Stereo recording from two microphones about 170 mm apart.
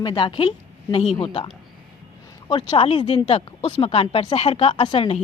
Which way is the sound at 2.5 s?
30° left (ahead or behind).